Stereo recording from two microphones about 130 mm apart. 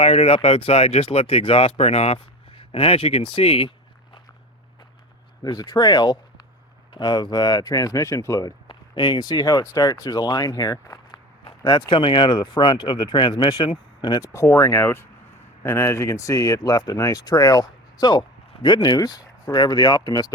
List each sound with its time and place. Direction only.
0.0 s speech: 50° left (ahead or behind)
5.4 s speech: 30° left (ahead or behind)
8.6 s speech: 35° left (ahead or behind)
11.4 s speech: 40° left (ahead or behind)